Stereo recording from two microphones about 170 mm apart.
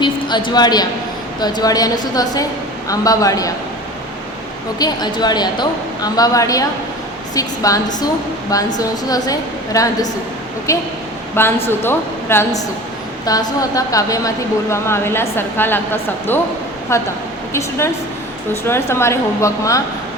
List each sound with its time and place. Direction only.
0.0 s a woman's voice: 25° left (ahead or behind)
4.8 s a woman's voice: 25° left (ahead or behind)